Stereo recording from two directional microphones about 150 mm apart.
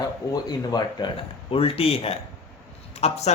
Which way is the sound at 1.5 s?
40° left (ahead or behind).